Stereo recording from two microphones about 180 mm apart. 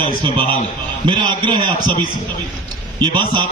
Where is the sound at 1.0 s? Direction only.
25° right (ahead or behind).